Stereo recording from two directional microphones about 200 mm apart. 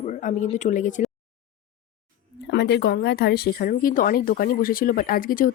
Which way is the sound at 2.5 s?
60° left (ahead or behind).